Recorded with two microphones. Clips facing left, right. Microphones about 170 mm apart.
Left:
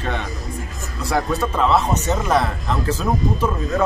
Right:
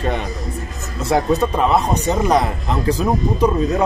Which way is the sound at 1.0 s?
20° right (ahead or behind).